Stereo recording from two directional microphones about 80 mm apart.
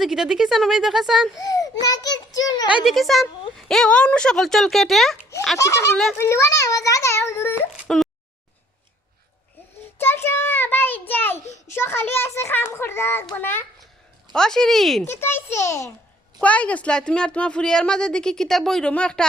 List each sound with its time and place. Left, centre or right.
0.0 s speech: centre
1.4 s a child's voice: left
2.6 s speech: centre
2.9 s speech: centre
5.5 s a child's voice: left
7.9 s a sound: centre
10.0 s a child's voice: left
14.3 s speech: centre
15.0 s a child's voice: left
16.4 s a woman's voice: centre